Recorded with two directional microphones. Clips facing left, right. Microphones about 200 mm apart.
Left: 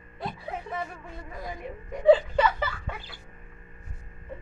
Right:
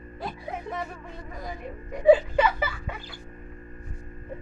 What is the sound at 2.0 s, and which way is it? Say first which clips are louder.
Speech: right 1 dB; 10° right (ahead or behind).